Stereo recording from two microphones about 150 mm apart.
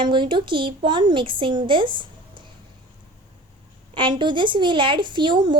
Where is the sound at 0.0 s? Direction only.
35° right (ahead or behind).